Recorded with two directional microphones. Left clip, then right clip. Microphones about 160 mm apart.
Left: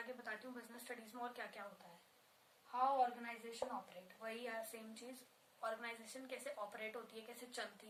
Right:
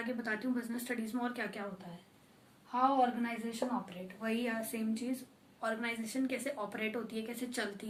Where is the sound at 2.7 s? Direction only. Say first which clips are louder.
Right 7 dB; 10° right (ahead or behind).